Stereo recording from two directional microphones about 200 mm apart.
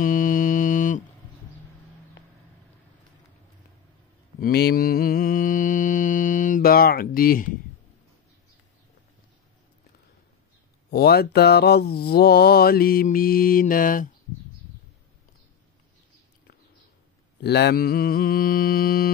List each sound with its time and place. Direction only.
0.0 s music: 45° left (ahead or behind)
4.4 s mantra: 55° left (ahead or behind)
10.9 s mantra: 55° left (ahead or behind)
17.4 s mantra: 55° left (ahead or behind)